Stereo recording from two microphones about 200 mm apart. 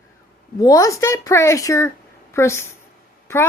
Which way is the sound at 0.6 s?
15° left (ahead or behind).